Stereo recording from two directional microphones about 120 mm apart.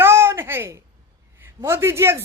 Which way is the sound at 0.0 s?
20° right (ahead or behind).